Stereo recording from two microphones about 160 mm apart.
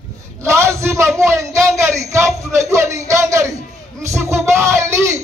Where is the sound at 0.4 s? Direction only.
15° right (ahead or behind).